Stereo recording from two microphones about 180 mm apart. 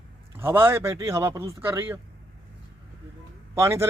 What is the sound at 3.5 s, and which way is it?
Speech, 15° right (ahead or behind).